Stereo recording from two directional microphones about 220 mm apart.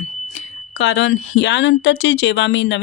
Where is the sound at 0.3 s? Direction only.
55° left (ahead or behind).